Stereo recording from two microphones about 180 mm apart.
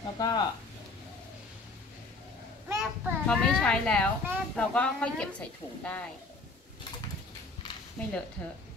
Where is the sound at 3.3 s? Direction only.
5° left (ahead or behind).